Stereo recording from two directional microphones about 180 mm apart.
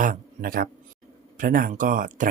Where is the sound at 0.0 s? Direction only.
50° right (ahead or behind).